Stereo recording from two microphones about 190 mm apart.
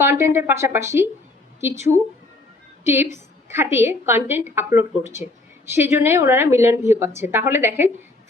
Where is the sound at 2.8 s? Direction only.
10° right (ahead or behind).